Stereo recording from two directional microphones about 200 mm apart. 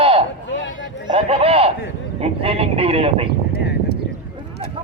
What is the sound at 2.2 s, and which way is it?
A man's voice, 30° right (ahead or behind).